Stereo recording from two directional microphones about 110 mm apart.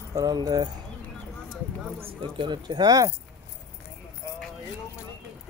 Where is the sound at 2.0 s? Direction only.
45° right (ahead or behind).